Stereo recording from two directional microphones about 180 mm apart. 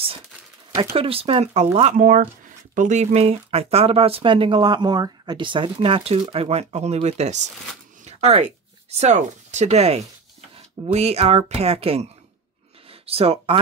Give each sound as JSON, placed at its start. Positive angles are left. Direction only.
{"t": 0.9, "sound": "speech", "side_deg": -30}
{"t": 8.0, "sound": "a sound", "side_deg": -35}
{"t": 8.9, "sound": "speech", "side_deg": -40}